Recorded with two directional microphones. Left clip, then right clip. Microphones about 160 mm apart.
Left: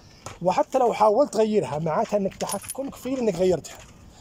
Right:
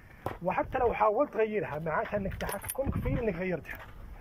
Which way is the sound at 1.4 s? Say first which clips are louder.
Left 8 dB; 30° left (ahead or behind).